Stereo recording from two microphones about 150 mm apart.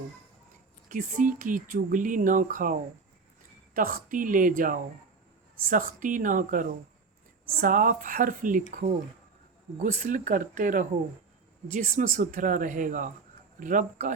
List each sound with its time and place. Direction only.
0.9 s speech: 60° right (ahead or behind)
3.8 s speech: 65° right (ahead or behind)
9.7 s speech: 50° right (ahead or behind)